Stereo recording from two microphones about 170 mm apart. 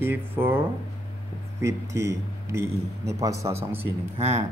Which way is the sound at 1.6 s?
15° right (ahead or behind).